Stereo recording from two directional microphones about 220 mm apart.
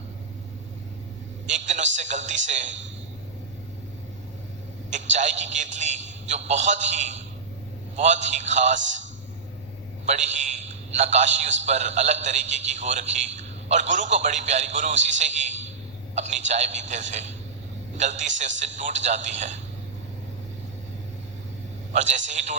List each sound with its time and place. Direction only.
1.5 s a man's voice: 35° right (ahead or behind)
2.6 s a man's voice: 55° right (ahead or behind)
5.1 s a man's voice: 30° right (ahead or behind)
8.8 s a man's voice: 55° right (ahead or behind)
10.1 s a man's voice: 30° right (ahead or behind)
21.9 s a man's voice: 30° right (ahead or behind)